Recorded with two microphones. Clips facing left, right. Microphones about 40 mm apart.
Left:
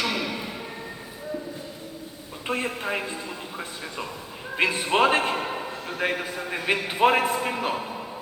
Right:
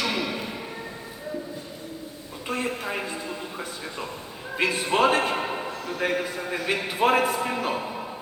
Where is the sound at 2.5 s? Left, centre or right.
Left.